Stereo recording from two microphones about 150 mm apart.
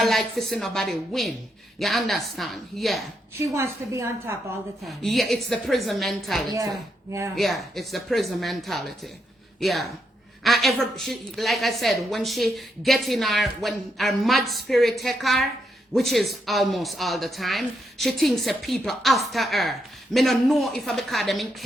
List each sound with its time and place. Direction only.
0.0 s a woman's voice: centre (ahead or behind)
3.3 s a woman's voice: 20° right (ahead or behind)
4.8 s a woman's voice: centre (ahead or behind)